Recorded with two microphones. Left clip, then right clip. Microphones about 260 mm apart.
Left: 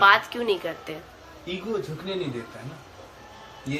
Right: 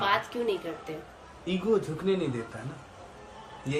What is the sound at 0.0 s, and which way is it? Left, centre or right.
Speech, centre.